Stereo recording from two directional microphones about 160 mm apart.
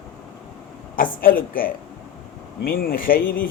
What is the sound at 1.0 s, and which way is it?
Speech, 60° left (ahead or behind).